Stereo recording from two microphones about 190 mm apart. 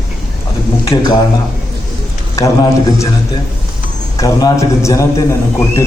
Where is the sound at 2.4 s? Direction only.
15° left (ahead or behind).